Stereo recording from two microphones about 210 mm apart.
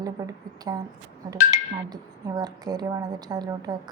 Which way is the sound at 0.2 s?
15° right (ahead or behind).